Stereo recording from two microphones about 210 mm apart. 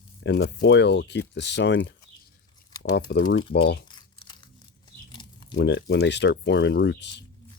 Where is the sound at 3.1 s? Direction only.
55° left (ahead or behind).